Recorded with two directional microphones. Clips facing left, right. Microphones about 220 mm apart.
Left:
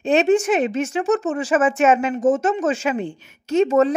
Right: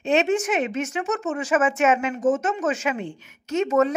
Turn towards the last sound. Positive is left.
turn(degrees=30)  # may be behind; listen again after turning